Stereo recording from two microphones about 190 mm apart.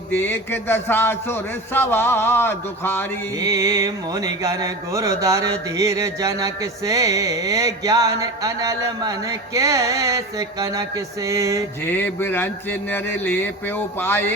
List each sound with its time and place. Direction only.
0.1 s a man's voice: 10° left (ahead or behind)
3.4 s music: 15° right (ahead or behind)
11.9 s a man's voice: 10° left (ahead or behind)